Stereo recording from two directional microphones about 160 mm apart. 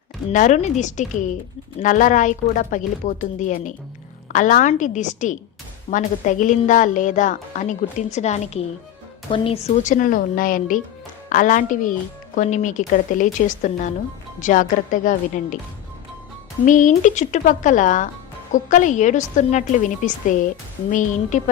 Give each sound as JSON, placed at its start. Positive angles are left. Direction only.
{"t": 0.3, "sound": "a woman's voice", "side_deg": 50}
{"t": 9.8, "sound": "a woman's voice", "side_deg": 55}
{"t": 16.6, "sound": "a woman's voice", "side_deg": 50}